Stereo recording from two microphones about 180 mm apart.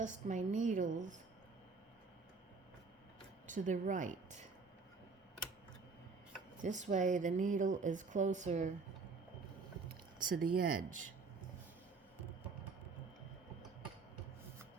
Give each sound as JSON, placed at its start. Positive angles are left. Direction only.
{"t": 0.0, "sound": "speech", "side_deg": -45}
{"t": 3.4, "sound": "a woman's voice", "side_deg": -45}
{"t": 6.6, "sound": "speech", "side_deg": -40}
{"t": 10.2, "sound": "speech", "side_deg": -55}